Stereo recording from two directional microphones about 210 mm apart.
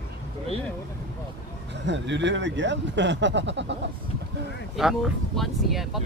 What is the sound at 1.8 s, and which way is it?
Speech, 60° right (ahead or behind).